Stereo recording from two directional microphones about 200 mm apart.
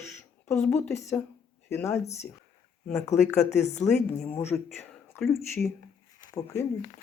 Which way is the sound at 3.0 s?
35° left (ahead or behind).